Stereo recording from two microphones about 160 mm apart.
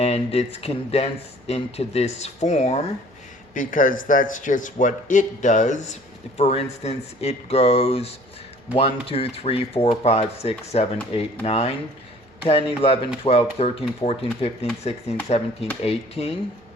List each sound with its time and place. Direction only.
0.0 s speech: 40° left (ahead or behind)
3.5 s a man's voice: 55° left (ahead or behind); by 16.3 s 40° left (ahead or behind)